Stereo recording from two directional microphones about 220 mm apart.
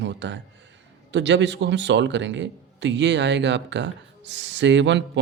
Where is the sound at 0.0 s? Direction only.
55° right (ahead or behind).